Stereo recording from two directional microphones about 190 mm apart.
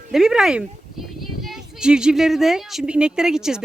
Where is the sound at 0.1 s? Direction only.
5° right (ahead or behind).